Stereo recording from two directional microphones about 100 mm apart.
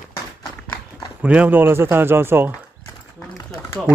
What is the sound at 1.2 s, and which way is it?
Speech, 15° right (ahead or behind).